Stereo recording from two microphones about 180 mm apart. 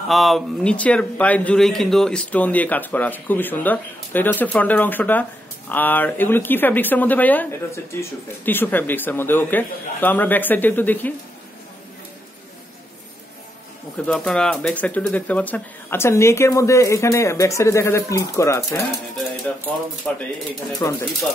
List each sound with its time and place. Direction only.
0.1 s speech: centre (ahead or behind)
14.0 s speech: 5° left (ahead or behind)
20.1 s speech: 5° left (ahead or behind)